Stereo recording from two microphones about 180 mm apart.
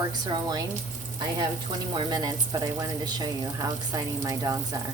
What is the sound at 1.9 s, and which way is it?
Speech, 20° right (ahead or behind).